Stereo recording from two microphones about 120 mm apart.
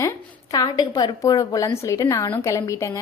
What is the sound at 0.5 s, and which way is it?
A woman's voice, 35° left (ahead or behind).